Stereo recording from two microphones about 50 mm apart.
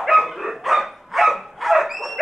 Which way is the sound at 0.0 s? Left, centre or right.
Centre.